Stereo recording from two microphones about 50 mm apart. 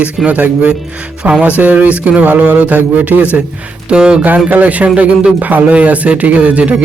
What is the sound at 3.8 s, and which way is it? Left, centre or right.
Speech, centre.